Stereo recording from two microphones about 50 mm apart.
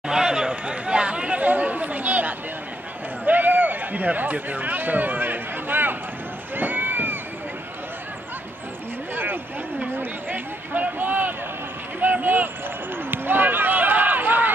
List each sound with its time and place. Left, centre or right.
0.1 s chatter: centre; by 2.3 s right
3.3 s a sound: right
6.5 s rowboat: right
9.1 s a sound: right
12.0 s vehicle: right
12.9 s basketball bounce: right